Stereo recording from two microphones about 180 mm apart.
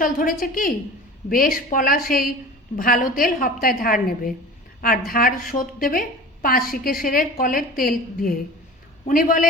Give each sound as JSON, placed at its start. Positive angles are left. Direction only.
{"t": 0.0, "sound": "a woman's voice", "side_deg": 50}